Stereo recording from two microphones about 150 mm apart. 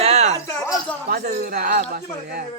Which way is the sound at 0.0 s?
45° right (ahead or behind).